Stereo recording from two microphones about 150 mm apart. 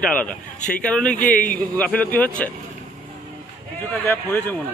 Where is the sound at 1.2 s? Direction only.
60° left (ahead or behind).